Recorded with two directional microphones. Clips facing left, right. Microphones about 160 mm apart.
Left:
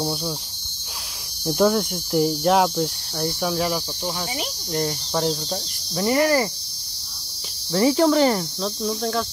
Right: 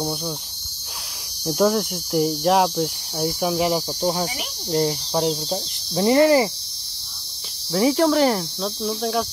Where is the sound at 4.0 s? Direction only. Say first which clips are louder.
Right 7 dB; 35° right (ahead or behind).